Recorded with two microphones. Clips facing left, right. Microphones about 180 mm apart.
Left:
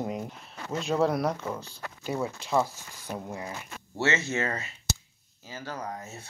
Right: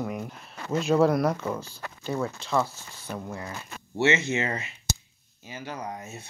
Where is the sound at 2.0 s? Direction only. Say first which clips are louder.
Right 1 dB; 10° left (ahead or behind).